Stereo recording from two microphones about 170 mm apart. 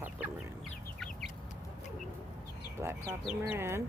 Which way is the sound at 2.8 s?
15° right (ahead or behind).